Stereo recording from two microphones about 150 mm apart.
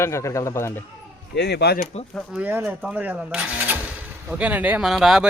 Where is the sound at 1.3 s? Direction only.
90° left.